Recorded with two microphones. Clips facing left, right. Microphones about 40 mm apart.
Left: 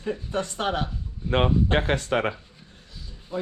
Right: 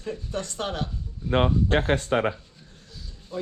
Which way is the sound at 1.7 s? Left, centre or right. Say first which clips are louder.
Right 3 dB; left.